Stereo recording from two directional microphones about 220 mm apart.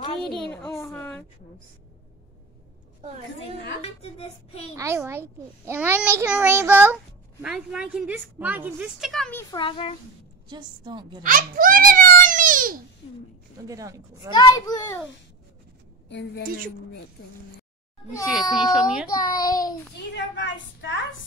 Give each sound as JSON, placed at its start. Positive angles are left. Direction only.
{"t": 0.3, "sound": "a child's voice", "side_deg": 10}
{"t": 3.3, "sound": "a woman's voice", "side_deg": 50}
{"t": 4.0, "sound": "child singing", "side_deg": 25}
{"t": 4.7, "sound": "a child's voice", "side_deg": -15}
{"t": 9.6, "sound": "child singing", "side_deg": 25}
{"t": 10.5, "sound": "a woman's voice", "side_deg": -20}
{"t": 11.2, "sound": "a sound", "side_deg": -40}
{"t": 13.7, "sound": "a child's voice", "side_deg": -15}
{"t": 14.3, "sound": "a child's voice", "side_deg": 20}
{"t": 16.1, "sound": "a woman's voice", "side_deg": 50}
{"t": 16.4, "sound": "speech", "side_deg": -40}
{"t": 18.2, "sound": "a woman's voice", "side_deg": 0}
{"t": 19.0, "sound": "a child's voice", "side_deg": 15}
{"t": 20.2, "sound": "a woman's voice", "side_deg": 55}